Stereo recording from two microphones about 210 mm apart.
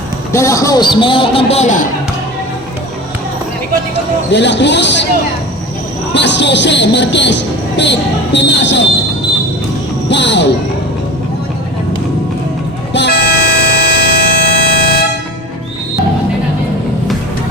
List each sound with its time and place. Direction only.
0.3 s a man's voice: 15° left (ahead or behind); by 1.9 s 35° left (ahead or behind)
4.3 s speech: 55° left (ahead or behind)
6.1 s speech: 55° left (ahead or behind)
10.1 s speech: 55° left (ahead or behind)
12.9 s music: 55° left (ahead or behind)